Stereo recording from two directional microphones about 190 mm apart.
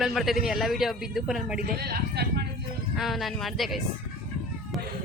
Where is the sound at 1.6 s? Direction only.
55° right (ahead or behind).